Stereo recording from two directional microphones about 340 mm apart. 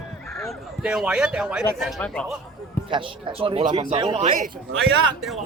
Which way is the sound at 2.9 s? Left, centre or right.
Centre.